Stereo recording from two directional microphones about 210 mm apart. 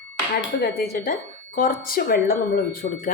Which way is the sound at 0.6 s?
45° left (ahead or behind).